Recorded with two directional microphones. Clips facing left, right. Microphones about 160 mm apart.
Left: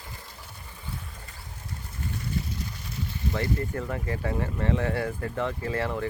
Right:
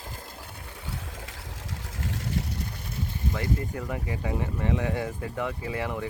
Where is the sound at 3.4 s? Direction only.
15° right (ahead or behind).